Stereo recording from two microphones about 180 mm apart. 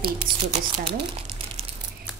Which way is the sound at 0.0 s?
30° right (ahead or behind).